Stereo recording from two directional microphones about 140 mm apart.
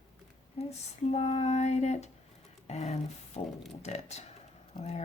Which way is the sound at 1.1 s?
50° left (ahead or behind).